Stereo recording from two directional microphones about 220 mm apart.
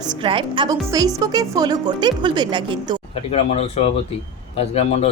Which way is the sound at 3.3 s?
30° left (ahead or behind).